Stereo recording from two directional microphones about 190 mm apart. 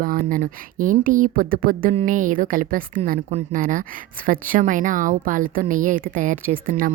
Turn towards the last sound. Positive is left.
turn(degrees=-45)  # may be behind; listen again after turning